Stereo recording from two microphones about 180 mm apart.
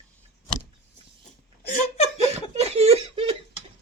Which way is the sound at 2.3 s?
35° right (ahead or behind).